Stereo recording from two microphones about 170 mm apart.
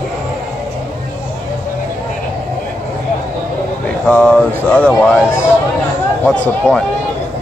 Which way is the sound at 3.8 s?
5° left (ahead or behind).